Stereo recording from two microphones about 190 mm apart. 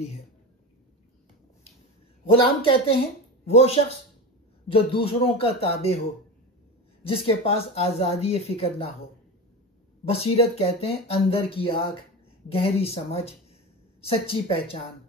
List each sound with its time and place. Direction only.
2.2 s speech: 30° left (ahead or behind)
7.0 s speech: 30° left (ahead or behind)
10.0 s speech: 30° left (ahead or behind)